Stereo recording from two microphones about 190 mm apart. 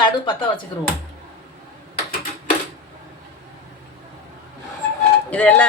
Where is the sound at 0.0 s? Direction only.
25° left (ahead or behind).